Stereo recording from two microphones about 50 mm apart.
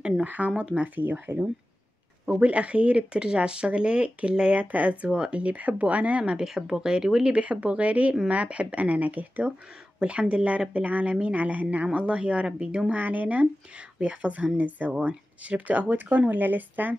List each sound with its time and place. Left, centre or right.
0.0 s speech: centre
0.7 s speech: right
2.2 s speech: right
6.4 s speech: centre
7.3 s speech: right
12.9 s speech: right